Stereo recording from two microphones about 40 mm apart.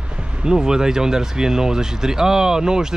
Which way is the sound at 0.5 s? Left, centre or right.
Centre.